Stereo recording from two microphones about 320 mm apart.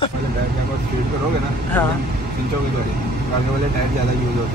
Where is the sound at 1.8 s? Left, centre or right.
Centre.